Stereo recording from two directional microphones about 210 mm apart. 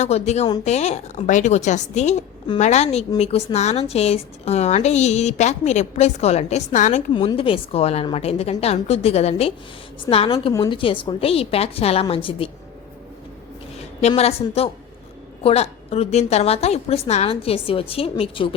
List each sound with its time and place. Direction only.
0.0 s a woman's voice: 30° left (ahead or behind)
7.1 s a woman's voice: 25° left (ahead or behind)
14.1 s a woman's voice: 30° left (ahead or behind)